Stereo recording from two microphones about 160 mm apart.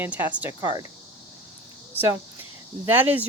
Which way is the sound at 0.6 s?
25° right (ahead or behind).